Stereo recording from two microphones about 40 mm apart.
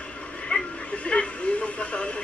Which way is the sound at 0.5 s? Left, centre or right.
Left.